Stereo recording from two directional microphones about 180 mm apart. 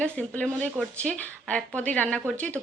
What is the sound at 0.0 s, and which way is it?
Speech, 5° left (ahead or behind).